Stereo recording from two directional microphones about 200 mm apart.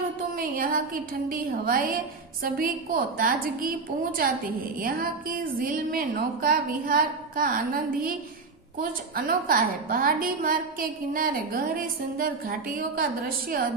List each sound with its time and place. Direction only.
0.2 s a woman's voice: 45° right (ahead or behind)
4.8 s a woman's voice: 45° right (ahead or behind)